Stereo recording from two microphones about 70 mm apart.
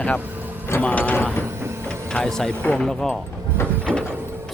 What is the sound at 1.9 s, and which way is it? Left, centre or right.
Speech, centre.